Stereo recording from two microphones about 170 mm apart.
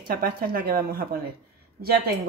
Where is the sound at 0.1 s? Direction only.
60° right (ahead or behind).